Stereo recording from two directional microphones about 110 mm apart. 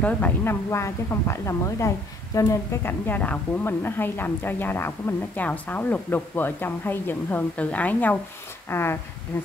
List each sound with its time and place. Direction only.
0.0 s speech: 20° left (ahead or behind)